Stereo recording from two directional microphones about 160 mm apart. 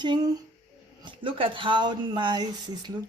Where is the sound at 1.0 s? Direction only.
30° right (ahead or behind).